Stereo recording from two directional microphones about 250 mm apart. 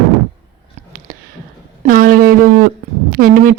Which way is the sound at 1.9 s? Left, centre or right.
Right.